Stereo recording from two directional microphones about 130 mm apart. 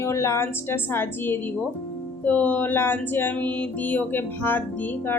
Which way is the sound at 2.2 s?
10° left (ahead or behind).